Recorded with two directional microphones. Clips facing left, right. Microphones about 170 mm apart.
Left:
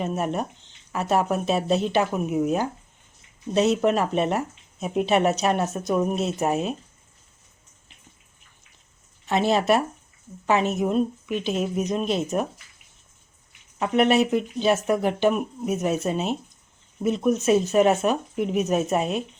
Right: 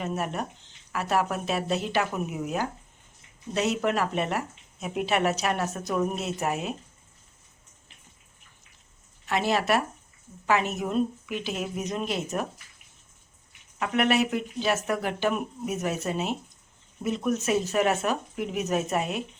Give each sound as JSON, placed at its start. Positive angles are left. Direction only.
{"t": 0.0, "sound": "speech", "side_deg": 25}
{"t": 9.2, "sound": "speech", "side_deg": 25}
{"t": 13.7, "sound": "speech", "side_deg": 25}